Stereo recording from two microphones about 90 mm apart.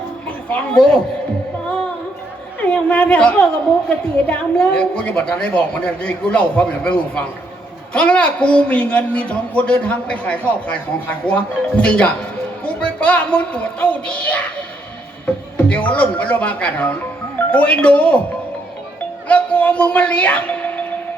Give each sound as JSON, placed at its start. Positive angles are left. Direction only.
{"t": 0.4, "sound": "speech", "side_deg": 15}
{"t": 2.6, "sound": "a woman's voice", "side_deg": 15}
{"t": 15.5, "sound": "speech", "side_deg": 15}
{"t": 19.3, "sound": "a woman's voice", "side_deg": 15}